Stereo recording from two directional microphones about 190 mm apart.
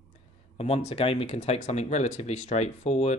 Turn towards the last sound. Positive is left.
turn(degrees=35)  # may be behind; listen again after turning